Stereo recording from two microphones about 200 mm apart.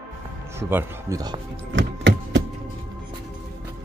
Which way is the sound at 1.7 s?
60° right (ahead or behind).